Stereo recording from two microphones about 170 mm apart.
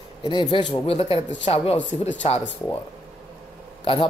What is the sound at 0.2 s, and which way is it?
Speech, 25° left (ahead or behind).